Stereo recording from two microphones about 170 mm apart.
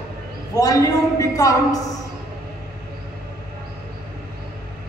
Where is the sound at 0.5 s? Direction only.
20° left (ahead or behind).